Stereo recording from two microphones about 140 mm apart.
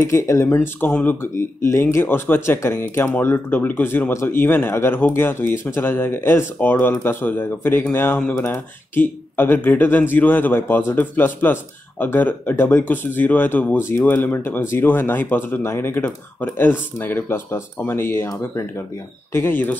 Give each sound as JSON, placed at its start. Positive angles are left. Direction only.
{"t": 0.0, "sound": "speech", "side_deg": 20}
{"t": 0.6, "sound": "speech", "side_deg": 10}